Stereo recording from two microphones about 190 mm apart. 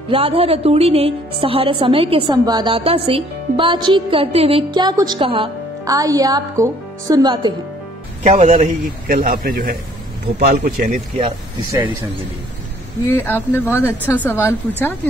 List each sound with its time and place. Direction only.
0.1 s a woman's voice: 30° right (ahead or behind)
8.2 s speech: 35° right (ahead or behind)
8.5 s a man's voice: 50° right (ahead or behind)
13.0 s speech: 10° left (ahead or behind)